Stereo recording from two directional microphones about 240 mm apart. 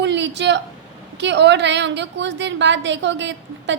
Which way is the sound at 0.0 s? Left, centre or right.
Right.